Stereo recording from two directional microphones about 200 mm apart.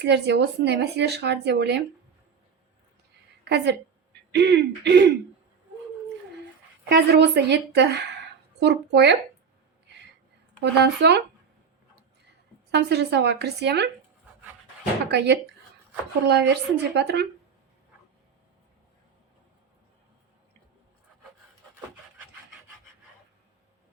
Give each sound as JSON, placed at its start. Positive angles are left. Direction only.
{"t": 0.0, "sound": "speech", "side_deg": -60}
{"t": 4.3, "sound": "speech", "side_deg": -60}
{"t": 6.8, "sound": "speech", "side_deg": -55}
{"t": 10.6, "sound": "speech", "side_deg": -60}
{"t": 12.7, "sound": "speech", "side_deg": -60}
{"t": 15.1, "sound": "speech", "side_deg": -60}